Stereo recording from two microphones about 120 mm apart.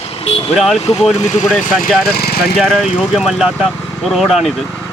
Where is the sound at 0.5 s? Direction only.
Centre (ahead or behind).